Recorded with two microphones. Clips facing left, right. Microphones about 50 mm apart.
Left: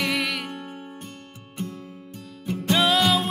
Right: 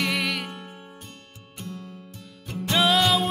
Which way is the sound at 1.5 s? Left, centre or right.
Left.